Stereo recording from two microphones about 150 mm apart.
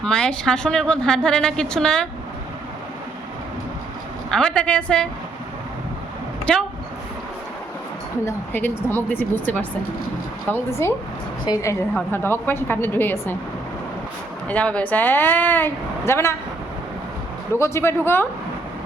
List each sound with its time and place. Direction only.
0.0 s a woman's voice: 5° left (ahead or behind)
4.3 s a woman's voice: 5° left (ahead or behind)
6.5 s a woman's voice: 5° left (ahead or behind)
8.2 s a woman's voice: 15° left (ahead or behind)
14.4 s a woman's voice: 10° left (ahead or behind)
17.5 s a woman's voice: 15° left (ahead or behind)